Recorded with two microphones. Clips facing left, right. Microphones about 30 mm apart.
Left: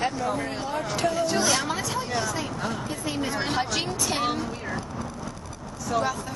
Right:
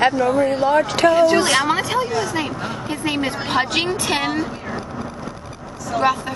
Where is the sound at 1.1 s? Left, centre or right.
Right.